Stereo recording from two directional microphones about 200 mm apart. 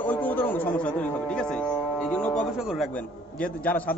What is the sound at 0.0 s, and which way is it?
Music, 10° left (ahead or behind).